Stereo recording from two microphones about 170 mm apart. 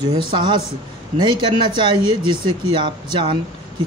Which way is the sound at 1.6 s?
30° right (ahead or behind).